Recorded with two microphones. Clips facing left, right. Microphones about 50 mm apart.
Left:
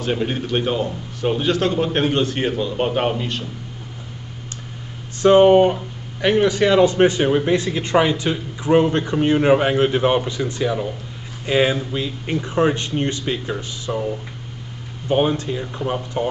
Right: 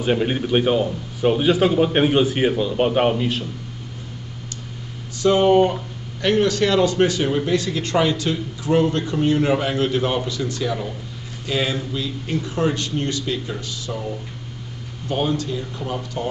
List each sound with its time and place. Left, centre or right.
0.0 s a man's voice: centre
5.2 s a man's voice: left
15.0 s a man's voice: left